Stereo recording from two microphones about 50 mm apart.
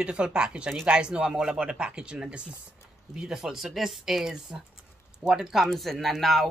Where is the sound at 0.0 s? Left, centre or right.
Centre.